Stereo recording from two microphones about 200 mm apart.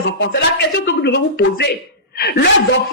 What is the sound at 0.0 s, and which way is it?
Speech, 55° left (ahead or behind).